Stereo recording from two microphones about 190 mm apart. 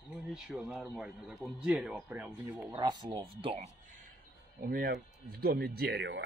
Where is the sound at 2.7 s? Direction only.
20° right (ahead or behind).